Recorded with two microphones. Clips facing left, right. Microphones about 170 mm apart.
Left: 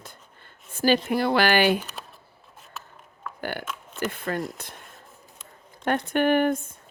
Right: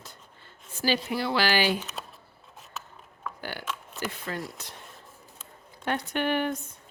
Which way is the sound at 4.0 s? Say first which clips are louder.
Left 7 dB; 55° left (ahead or behind).